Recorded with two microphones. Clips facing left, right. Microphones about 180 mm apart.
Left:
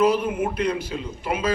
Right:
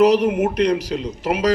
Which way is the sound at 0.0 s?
75° right (ahead or behind).